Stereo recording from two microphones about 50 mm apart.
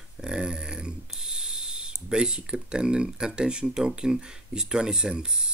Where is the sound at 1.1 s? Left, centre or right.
Centre.